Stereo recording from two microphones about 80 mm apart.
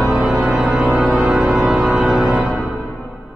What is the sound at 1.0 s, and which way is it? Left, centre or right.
Music, centre.